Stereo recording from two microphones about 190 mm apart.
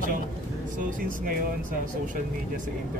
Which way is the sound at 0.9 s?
45° right (ahead or behind).